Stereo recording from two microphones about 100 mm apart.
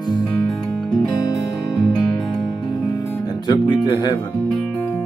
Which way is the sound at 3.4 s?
45° left (ahead or behind).